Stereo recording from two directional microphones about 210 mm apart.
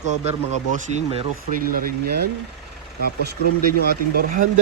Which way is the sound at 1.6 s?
45° right (ahead or behind).